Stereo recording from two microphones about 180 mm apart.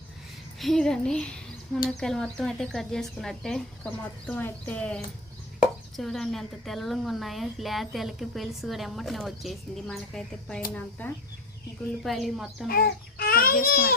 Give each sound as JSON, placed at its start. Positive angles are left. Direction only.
{"t": 0.6, "sound": "a woman's voice", "side_deg": 0}
{"t": 12.6, "sound": "a child's voice", "side_deg": 55}